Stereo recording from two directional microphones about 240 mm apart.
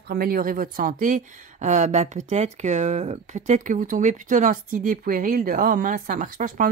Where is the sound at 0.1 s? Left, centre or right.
Right.